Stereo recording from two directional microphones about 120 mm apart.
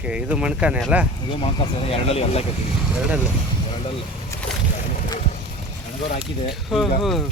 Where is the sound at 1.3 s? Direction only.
50° left (ahead or behind).